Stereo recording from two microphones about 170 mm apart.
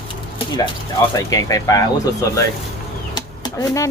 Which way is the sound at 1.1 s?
20° left (ahead or behind).